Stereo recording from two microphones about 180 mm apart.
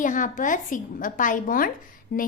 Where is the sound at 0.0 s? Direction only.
45° left (ahead or behind).